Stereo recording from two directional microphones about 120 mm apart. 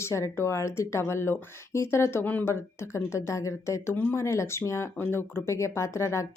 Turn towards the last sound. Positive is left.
turn(degrees=25)  # may be behind; listen again after turning